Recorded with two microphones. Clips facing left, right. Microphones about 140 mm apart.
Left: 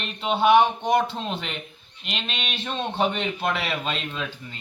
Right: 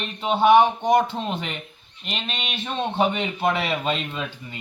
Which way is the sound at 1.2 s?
10° right (ahead or behind).